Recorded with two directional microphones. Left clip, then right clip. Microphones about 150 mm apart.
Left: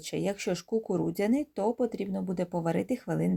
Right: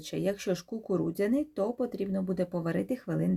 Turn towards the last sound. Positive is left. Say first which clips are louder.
# left 1 dB
turn(degrees=25)  # may be behind; listen again after turning